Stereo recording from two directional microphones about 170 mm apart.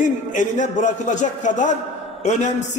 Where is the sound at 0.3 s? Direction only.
45° left (ahead or behind).